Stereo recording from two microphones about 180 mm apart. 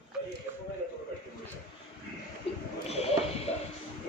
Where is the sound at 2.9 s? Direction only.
35° left (ahead or behind).